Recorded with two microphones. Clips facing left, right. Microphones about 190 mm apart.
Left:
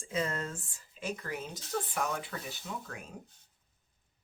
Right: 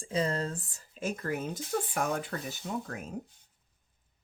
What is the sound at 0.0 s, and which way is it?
Speech, 35° right (ahead or behind).